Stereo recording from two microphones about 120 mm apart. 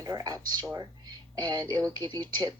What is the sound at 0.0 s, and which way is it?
Speech, 30° right (ahead or behind).